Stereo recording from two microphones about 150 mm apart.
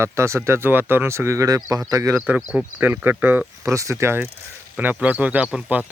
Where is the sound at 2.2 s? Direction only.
10° right (ahead or behind).